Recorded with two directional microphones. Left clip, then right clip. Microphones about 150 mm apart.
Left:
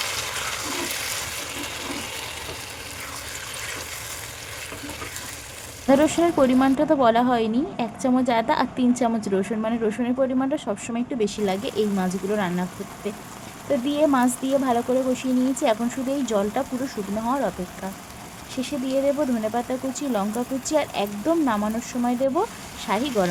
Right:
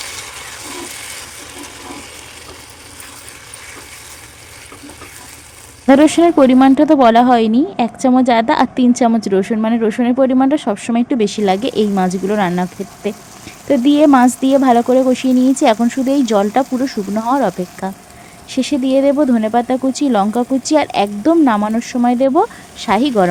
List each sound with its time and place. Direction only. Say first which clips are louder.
5.9 s speech: right 9 dB; 50° right (ahead or behind)
18.5 s speech: right 11 dB; 50° right (ahead or behind)